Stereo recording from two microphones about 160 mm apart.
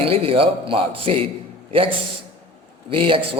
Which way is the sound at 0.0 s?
35° right (ahead or behind).